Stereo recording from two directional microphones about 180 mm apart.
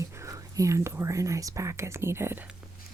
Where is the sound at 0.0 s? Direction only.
15° right (ahead or behind).